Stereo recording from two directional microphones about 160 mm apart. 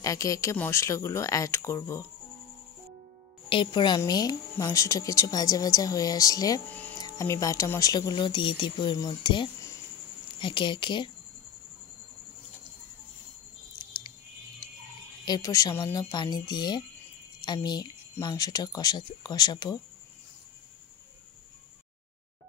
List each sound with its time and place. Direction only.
0.0 s speech: 20° left (ahead or behind)
3.4 s speech: 30° left (ahead or behind)
15.2 s speech: 25° left (ahead or behind)